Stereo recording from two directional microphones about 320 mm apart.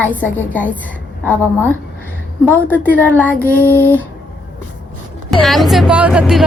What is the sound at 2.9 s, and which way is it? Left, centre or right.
Speech, centre.